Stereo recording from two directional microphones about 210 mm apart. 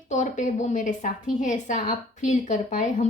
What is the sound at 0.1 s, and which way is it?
A woman's voice, 35° left (ahead or behind).